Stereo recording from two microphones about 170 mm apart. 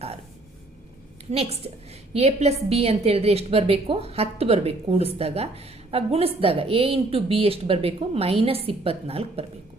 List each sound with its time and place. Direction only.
1.3 s a woman's voice: 35° right (ahead or behind)